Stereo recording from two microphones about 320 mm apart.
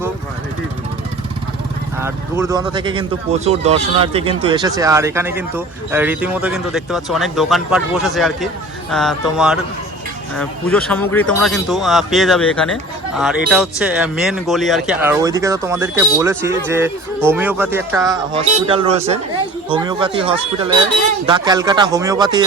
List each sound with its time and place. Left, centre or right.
2.0 s speech: centre